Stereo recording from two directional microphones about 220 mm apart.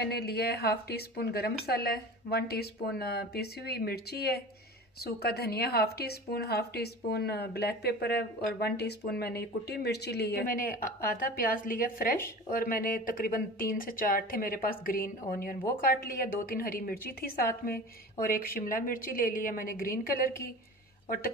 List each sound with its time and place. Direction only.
0.0 s speech: 45° left (ahead or behind)